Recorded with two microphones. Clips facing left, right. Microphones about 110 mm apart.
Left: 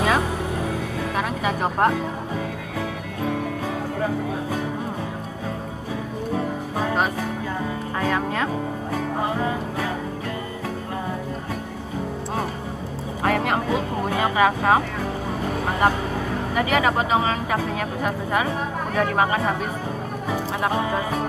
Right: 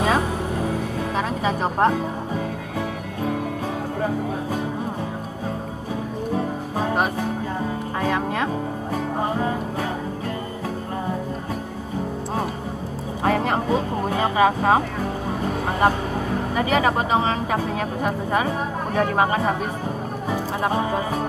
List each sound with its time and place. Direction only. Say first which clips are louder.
0.0 s music: even; 35° right (ahead or behind)
4.0 s music: right 1 dB; 40° right (ahead or behind)
6.3 s music: even; 40° right (ahead or behind)
8.9 s music: right 1 dB; 35° right (ahead or behind)
13.2 s vehicle: right 1 dB; 30° right (ahead or behind)
18.9 s speech: right 1 dB; 35° right (ahead or behind)
20.2 s music: right 1 dB; 35° right (ahead or behind)